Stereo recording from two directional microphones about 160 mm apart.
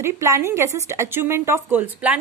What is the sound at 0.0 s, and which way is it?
A woman's voice, 15° right (ahead or behind).